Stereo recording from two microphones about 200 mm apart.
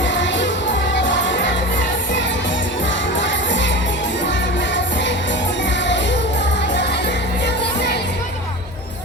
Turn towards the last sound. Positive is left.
turn(degrees=60)  # may be behind; listen again after turning